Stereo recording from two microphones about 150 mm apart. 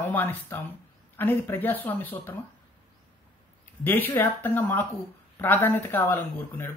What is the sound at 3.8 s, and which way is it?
Speech, 15° left (ahead or behind).